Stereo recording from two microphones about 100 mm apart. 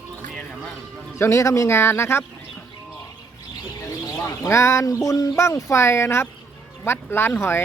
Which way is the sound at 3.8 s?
35° left (ahead or behind).